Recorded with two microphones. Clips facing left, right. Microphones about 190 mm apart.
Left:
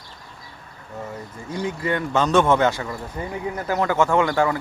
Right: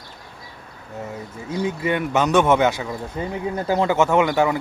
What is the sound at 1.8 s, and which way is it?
Speech, 20° right (ahead or behind).